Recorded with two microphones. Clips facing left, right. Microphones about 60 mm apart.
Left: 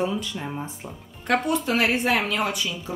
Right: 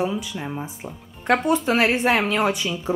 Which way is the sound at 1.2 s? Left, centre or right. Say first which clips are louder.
Right 3 dB; right.